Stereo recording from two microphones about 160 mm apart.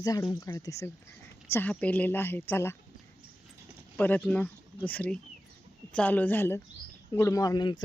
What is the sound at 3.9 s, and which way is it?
Speech, 10° left (ahead or behind).